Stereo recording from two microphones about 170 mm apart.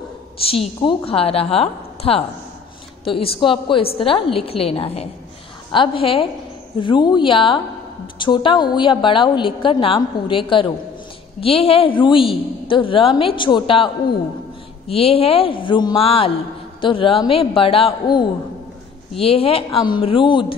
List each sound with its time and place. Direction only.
0.5 s a woman's voice: 30° left (ahead or behind)
14.9 s a woman's voice: 35° left (ahead or behind)